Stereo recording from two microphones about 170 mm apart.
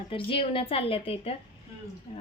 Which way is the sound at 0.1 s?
30° left (ahead or behind).